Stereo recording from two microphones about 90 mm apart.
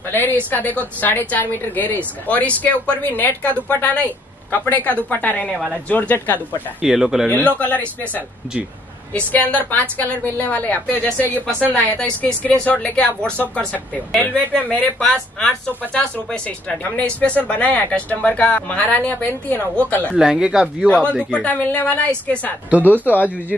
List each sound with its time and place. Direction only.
0.1 s a woman's voice: 20° left (ahead or behind)
6.8 s speech: 5° right (ahead or behind)
7.5 s speech: 20° left (ahead or behind)
20.2 s speech: 10° right (ahead or behind)
21.0 s a woman's voice: 15° left (ahead or behind)